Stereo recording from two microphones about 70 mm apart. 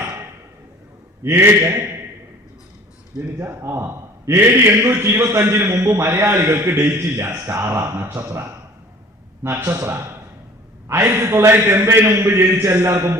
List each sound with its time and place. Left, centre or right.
1.2 s a man's voice: right
3.4 s a man's voice: right
9.4 s a man's voice: right
12.9 s a man's voice: right